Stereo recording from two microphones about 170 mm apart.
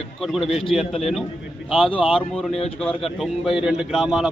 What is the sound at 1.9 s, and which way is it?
Speech, 30° left (ahead or behind).